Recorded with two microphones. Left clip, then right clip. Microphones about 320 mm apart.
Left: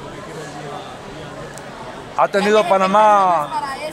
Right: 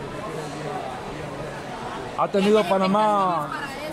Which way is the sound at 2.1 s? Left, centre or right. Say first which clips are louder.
Left 6 dB; left.